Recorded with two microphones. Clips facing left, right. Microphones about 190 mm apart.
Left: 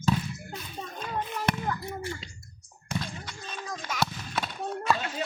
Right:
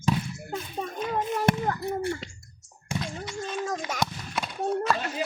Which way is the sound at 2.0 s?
60° right (ahead or behind).